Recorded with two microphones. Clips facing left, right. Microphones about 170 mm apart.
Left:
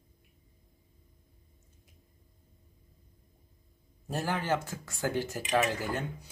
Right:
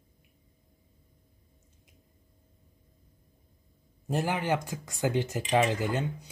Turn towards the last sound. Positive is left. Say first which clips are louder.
# right 3 dB
turn(degrees=-20)  # may be behind; listen again after turning